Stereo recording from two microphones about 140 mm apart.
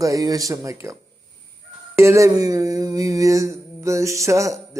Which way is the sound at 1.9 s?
20° right (ahead or behind).